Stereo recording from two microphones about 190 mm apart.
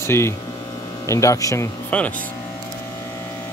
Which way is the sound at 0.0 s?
15° left (ahead or behind).